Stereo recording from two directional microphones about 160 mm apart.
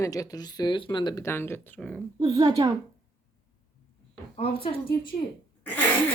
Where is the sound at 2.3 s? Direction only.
25° right (ahead or behind).